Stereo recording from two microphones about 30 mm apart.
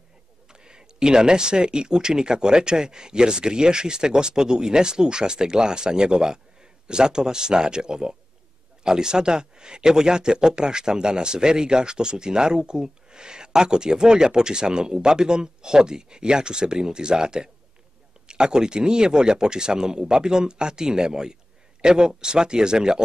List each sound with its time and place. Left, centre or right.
0.5 s speech: right